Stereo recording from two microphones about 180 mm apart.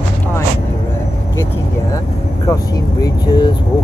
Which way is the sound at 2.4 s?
20° left (ahead or behind).